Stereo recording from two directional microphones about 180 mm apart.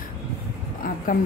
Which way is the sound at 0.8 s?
50° left (ahead or behind).